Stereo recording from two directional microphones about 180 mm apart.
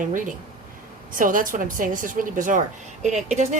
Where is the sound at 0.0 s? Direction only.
45° right (ahead or behind).